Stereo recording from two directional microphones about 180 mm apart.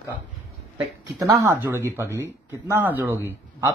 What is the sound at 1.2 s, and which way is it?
Speech, 15° right (ahead or behind).